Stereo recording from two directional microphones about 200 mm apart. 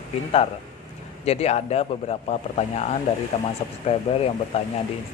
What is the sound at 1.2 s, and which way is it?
Speech, 30° left (ahead or behind).